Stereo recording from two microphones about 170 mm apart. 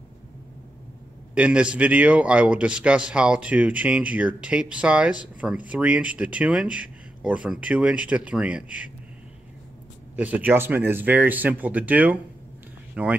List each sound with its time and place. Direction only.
1.3 s a man's voice: 5° right (ahead or behind)
10.1 s a man's voice: 10° right (ahead or behind)